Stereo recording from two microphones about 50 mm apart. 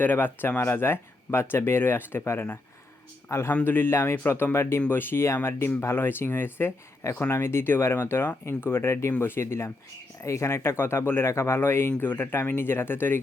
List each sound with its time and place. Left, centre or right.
0.0 s speech: left
3.5 s speech: left
3.9 s speech: left
4.2 s speech: left
5.2 s speech: left
9.2 s speech: left
10.2 s speech: left
11.9 s speech: left